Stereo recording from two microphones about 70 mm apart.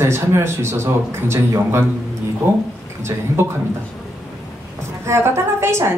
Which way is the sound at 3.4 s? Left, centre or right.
Right.